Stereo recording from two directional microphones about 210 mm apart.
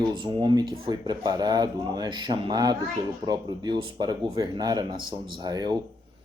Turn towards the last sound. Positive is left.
turn(degrees=-20)  # may be behind; listen again after turning